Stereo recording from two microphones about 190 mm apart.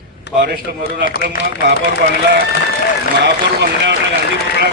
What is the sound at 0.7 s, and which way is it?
Speech, 55° right (ahead or behind).